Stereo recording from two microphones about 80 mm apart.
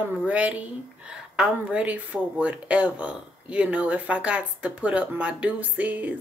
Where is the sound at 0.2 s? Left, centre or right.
Centre.